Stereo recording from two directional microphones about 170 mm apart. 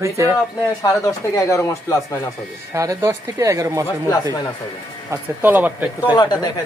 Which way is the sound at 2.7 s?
20° right (ahead or behind).